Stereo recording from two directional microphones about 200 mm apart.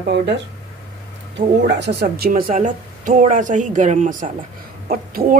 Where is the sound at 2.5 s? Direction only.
40° right (ahead or behind).